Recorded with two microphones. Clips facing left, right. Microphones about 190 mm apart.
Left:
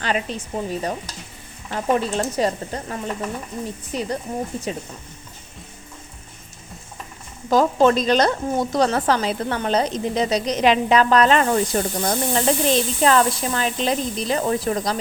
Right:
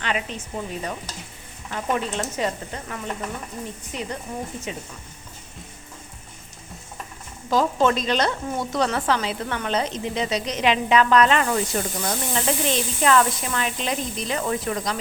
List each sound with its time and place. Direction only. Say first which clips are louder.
0.0 s speech: left 4 dB; 35° left (ahead or behind)
7.5 s speech: left 4 dB; 40° left (ahead or behind)